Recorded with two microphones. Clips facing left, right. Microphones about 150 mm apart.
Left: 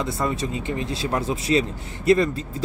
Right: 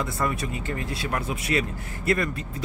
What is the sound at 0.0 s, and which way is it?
Speech, 25° left (ahead or behind).